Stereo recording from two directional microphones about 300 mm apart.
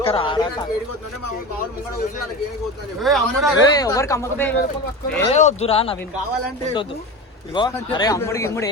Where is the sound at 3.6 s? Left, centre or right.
Centre.